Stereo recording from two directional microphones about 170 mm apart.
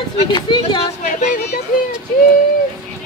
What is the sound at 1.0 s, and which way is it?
Speech, 45° left (ahead or behind).